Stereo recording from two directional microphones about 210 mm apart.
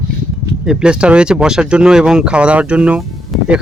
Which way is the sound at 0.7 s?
5° right (ahead or behind).